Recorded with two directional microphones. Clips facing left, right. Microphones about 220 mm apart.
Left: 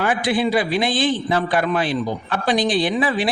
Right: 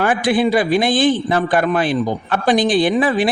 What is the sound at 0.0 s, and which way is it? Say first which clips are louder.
A man's voice: right 4 dB; 50° right (ahead or behind).